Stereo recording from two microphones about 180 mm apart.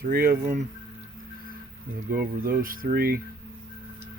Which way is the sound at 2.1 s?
55° right (ahead or behind).